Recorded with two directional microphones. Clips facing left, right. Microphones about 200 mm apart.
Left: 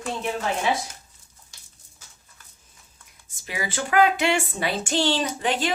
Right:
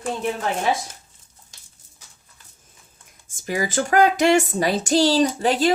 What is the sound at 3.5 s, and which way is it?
Speech, 45° right (ahead or behind).